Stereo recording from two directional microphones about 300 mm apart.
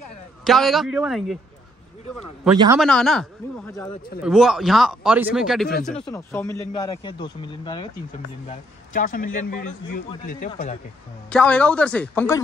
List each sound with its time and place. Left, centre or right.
0.4 s speech: centre
2.5 s a man's voice: centre
2.8 s speech: centre
8.5 s speech: left
11.2 s speech: centre